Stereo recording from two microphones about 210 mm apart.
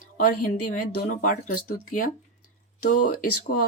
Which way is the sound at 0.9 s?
40° left (ahead or behind).